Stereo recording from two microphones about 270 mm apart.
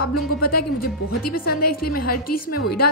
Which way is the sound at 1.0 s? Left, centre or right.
Left.